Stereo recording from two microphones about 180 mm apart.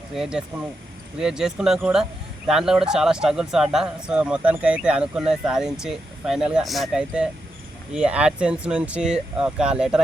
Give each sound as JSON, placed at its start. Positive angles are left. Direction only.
{"t": 0.1, "sound": "speech", "side_deg": -5}